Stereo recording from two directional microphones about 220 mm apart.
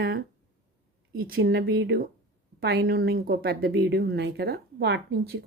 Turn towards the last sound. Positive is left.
turn(degrees=-50)  # may be behind; listen again after turning